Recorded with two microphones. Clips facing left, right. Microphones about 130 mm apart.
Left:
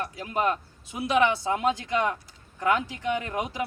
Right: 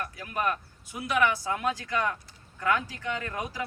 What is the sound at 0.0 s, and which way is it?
Speech, 25° left (ahead or behind).